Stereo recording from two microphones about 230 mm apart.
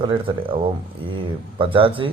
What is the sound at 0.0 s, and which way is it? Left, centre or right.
Speech, right.